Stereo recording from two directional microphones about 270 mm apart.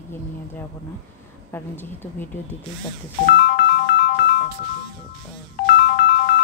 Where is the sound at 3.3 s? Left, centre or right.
Left.